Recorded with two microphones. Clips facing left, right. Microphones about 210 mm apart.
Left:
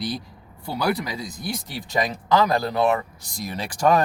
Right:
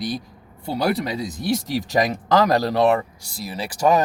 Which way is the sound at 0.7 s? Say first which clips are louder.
Right 3 dB; 30° right (ahead or behind).